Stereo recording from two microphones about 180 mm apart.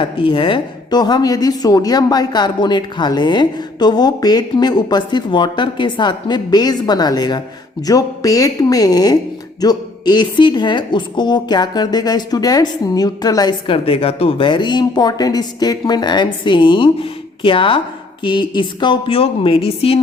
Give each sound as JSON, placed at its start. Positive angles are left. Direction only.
{"t": 0.0, "sound": "a woman's voice", "side_deg": 30}